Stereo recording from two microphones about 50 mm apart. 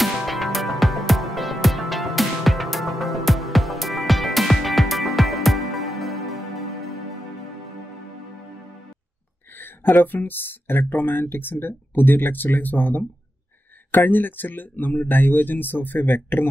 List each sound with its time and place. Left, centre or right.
0.0 s music: centre
9.6 s speech: left